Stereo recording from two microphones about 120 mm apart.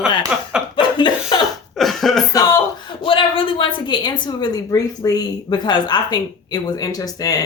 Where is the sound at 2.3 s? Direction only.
30° left (ahead or behind).